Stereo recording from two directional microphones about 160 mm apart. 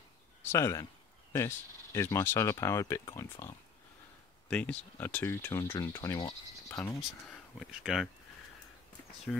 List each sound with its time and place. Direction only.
0.4 s speech: 15° left (ahead or behind)
4.5 s speech: 5° left (ahead or behind)
7.0 s speech: centre (ahead or behind)
9.3 s speech: 5° left (ahead or behind)